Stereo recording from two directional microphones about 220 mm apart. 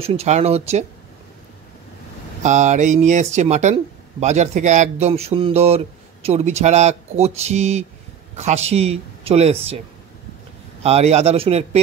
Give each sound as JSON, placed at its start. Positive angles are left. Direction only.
{"t": 0.0, "sound": "speech", "side_deg": -25}
{"t": 2.4, "sound": "speech", "side_deg": -35}
{"t": 10.8, "sound": "speech", "side_deg": -30}